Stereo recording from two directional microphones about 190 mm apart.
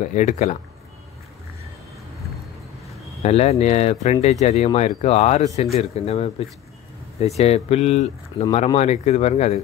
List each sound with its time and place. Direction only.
0.0 s speech: 40° left (ahead or behind)
3.2 s speech: 35° left (ahead or behind)